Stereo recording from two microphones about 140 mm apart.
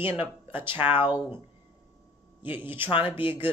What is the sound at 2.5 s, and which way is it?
Speech, 15° right (ahead or behind).